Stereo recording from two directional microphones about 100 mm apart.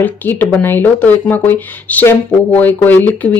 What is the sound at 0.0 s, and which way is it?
Speech, 20° left (ahead or behind).